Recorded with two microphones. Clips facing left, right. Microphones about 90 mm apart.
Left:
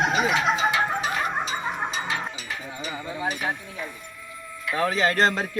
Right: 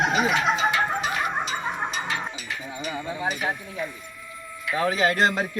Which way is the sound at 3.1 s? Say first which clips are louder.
Even; 15° right (ahead or behind).